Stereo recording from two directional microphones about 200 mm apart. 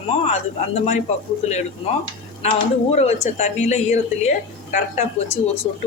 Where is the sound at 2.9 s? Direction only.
35° left (ahead or behind).